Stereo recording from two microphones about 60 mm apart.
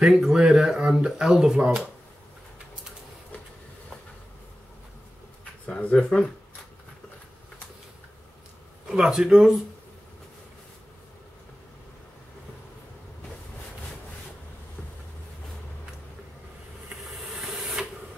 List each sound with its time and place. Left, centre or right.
0.0 s speech: centre
5.8 s speech: centre
8.8 s speech: centre
17.0 s hiss: centre